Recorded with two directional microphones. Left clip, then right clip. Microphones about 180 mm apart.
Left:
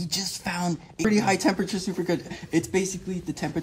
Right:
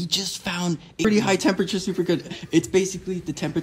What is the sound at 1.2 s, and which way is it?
Speech, 40° left (ahead or behind).